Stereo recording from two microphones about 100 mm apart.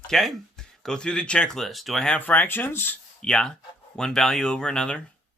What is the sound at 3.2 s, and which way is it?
Speech, 10° left (ahead or behind).